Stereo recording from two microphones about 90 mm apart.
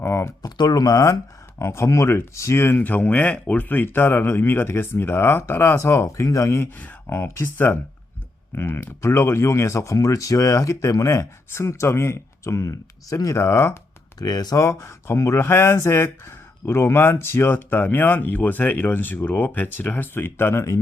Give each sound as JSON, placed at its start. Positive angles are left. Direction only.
{"t": 0.0, "sound": "speech", "side_deg": 30}
{"t": 0.4, "sound": "speech", "side_deg": 50}
{"t": 6.7, "sound": "speech", "side_deg": 20}
{"t": 14.2, "sound": "speech", "side_deg": 45}